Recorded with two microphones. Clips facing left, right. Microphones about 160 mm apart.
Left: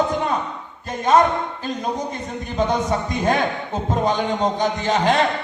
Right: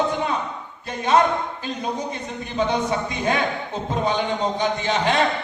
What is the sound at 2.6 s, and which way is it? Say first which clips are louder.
Speech: left 1 dB; 45° left (ahead or behind).